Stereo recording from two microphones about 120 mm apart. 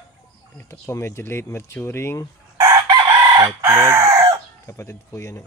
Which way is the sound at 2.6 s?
30° right (ahead or behind).